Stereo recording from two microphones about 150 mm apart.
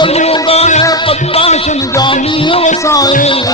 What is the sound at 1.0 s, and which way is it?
Music, 40° left (ahead or behind).